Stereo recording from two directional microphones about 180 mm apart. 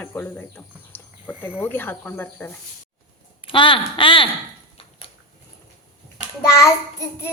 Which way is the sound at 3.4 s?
30° left (ahead or behind).